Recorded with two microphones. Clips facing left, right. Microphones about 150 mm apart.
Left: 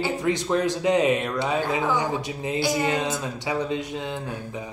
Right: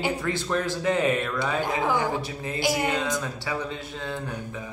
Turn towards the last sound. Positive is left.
turn(degrees=20)  # may be behind; listen again after turning